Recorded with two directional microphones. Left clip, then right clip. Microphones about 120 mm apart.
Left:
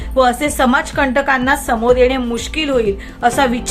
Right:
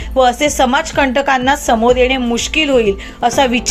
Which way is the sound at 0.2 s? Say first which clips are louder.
Right 2 dB; 25° right (ahead or behind).